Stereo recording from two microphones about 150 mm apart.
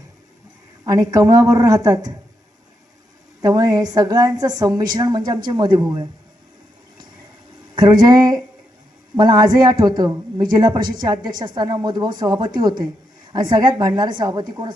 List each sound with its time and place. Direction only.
0.9 s a woman's voice: 20° right (ahead or behind)
3.4 s a woman's voice: 25° right (ahead or behind)
7.8 s a woman's voice: 30° right (ahead or behind)